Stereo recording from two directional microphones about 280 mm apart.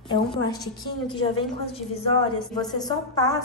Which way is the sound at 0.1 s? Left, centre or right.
Centre.